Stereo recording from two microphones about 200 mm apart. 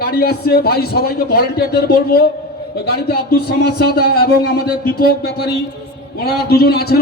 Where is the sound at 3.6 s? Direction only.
55° left (ahead or behind).